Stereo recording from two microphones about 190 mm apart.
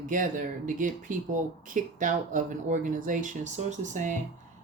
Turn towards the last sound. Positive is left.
turn(degrees=-40)  # may be behind; listen again after turning